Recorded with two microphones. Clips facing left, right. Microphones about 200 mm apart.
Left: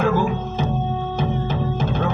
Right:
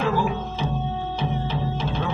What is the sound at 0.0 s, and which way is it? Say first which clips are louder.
Music: left 4 dB; 50° left (ahead or behind).